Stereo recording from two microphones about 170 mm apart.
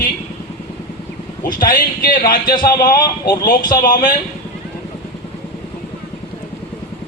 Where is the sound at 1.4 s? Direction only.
55° left (ahead or behind).